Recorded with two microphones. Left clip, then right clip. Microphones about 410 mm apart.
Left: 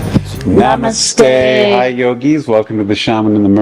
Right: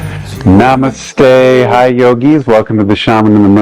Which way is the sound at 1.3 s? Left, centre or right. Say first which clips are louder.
Right 3 dB; right.